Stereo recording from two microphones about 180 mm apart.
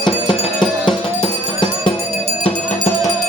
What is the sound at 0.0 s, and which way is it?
Music, 25° left (ahead or behind).